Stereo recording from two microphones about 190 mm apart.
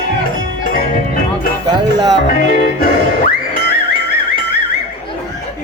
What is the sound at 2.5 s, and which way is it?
Music, 45° left (ahead or behind).